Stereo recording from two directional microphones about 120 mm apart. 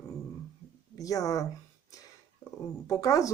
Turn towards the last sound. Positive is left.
turn(degrees=25)  # may be behind; listen again after turning